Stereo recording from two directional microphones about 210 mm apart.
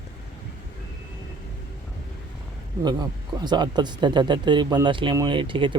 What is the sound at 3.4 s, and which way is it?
Speech, 20° right (ahead or behind).